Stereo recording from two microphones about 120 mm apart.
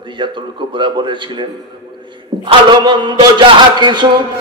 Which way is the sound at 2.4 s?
40° right (ahead or behind).